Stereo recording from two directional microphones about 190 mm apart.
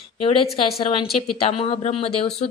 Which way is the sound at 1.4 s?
30° left (ahead or behind).